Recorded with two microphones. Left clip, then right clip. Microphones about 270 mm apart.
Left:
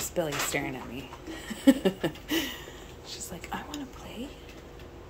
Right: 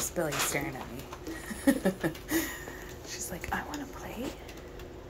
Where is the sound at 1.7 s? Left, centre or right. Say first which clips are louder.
Left 4 dB; centre.